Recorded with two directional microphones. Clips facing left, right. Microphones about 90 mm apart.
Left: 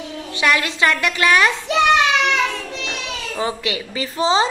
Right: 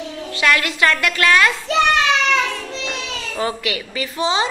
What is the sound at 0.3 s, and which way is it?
A woman's voice, 20° left (ahead or behind).